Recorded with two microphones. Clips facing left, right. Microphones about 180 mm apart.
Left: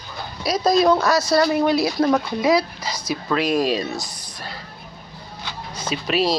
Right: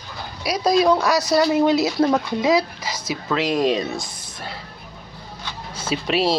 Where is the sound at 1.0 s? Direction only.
15° right (ahead or behind).